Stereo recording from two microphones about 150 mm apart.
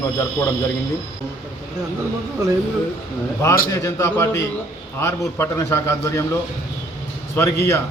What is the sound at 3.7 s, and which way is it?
A man's voice, 20° left (ahead or behind).